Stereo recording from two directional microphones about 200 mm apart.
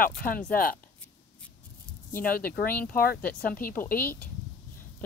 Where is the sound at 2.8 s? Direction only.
45° left (ahead or behind).